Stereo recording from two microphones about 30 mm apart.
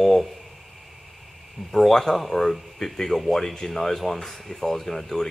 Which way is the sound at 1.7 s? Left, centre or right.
Centre.